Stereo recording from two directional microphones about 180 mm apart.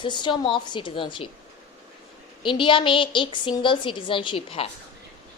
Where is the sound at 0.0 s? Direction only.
25° left (ahead or behind).